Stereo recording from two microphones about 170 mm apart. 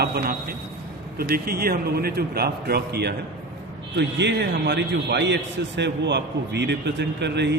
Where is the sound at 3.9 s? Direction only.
90° right.